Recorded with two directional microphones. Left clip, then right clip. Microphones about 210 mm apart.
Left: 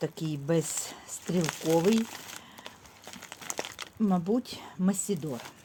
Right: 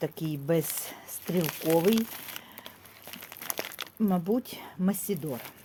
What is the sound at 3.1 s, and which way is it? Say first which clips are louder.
Crumpling: even; 20° right (ahead or behind).